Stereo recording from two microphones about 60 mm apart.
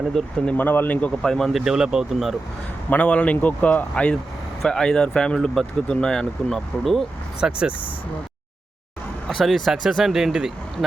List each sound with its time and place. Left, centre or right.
0.1 s speech: centre
0.5 s speech: left
1.2 s speech: centre
1.5 s speech: centre
2.9 s speech: left
7.4 s speech: centre
9.2 s speech: centre